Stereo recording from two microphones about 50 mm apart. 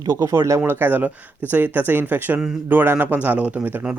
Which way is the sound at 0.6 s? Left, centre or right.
Right.